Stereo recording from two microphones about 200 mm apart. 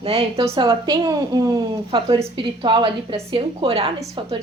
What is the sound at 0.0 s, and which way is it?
A woman's voice, 30° right (ahead or behind).